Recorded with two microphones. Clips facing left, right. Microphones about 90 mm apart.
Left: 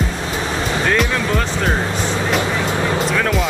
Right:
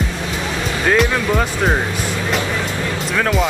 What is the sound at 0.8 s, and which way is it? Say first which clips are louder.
Speech: right 4 dB; 5° right (ahead or behind).